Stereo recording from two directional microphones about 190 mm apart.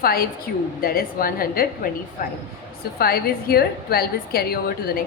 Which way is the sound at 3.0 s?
55° left (ahead or behind).